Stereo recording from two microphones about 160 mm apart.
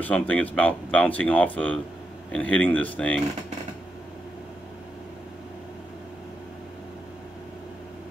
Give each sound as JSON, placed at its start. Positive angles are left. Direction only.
{"t": 0.0, "sound": "speech", "side_deg": 10}